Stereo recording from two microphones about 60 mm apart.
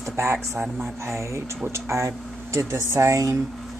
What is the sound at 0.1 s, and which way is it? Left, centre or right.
Speech, right.